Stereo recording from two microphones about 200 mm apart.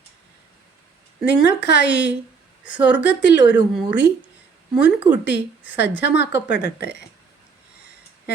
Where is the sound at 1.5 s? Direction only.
60° left (ahead or behind).